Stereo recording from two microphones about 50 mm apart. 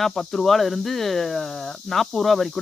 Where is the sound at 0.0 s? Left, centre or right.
Centre.